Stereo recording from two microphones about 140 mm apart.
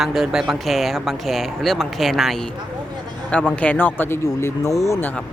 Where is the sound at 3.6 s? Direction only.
10° left (ahead or behind).